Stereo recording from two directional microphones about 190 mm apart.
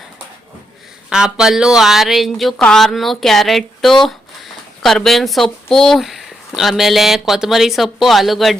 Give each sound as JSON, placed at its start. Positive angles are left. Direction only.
{"t": 1.1, "sound": "speech", "side_deg": -5}